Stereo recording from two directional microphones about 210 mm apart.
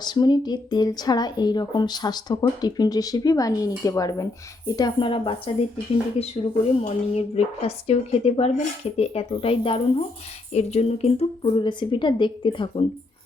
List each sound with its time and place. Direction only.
0.0 s speech: 20° left (ahead or behind)
6.8 s speech: 30° left (ahead or behind)